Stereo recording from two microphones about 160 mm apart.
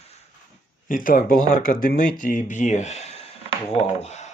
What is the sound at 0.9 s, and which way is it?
Speech, 60° left (ahead or behind).